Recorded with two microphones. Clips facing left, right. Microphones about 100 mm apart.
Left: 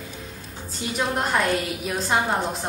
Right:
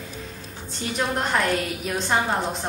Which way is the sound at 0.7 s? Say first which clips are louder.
Even; 5° left (ahead or behind).